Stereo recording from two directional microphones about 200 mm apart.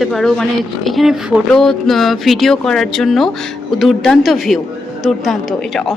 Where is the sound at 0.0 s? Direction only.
Centre (ahead or behind).